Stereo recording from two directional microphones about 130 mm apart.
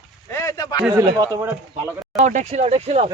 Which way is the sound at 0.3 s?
25° left (ahead or behind).